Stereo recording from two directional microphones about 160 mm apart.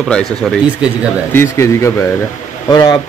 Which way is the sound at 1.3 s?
15° left (ahead or behind).